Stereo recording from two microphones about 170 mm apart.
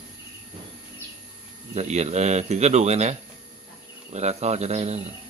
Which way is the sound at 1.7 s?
40° right (ahead or behind).